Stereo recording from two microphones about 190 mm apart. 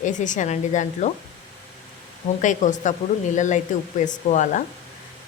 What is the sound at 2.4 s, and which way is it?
Speech, 40° left (ahead or behind).